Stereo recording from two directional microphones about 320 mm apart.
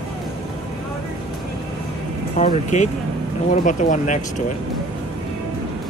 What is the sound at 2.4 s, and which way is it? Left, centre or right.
Speech, left.